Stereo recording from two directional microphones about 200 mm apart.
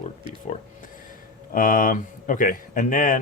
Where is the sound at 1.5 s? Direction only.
40° left (ahead or behind).